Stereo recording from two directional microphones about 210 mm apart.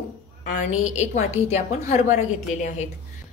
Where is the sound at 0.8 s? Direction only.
35° left (ahead or behind).